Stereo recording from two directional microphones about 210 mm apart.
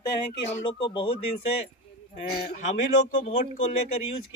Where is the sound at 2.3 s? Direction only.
35° left (ahead or behind).